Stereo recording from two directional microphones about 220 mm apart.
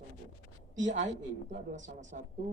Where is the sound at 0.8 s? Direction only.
35° right (ahead or behind).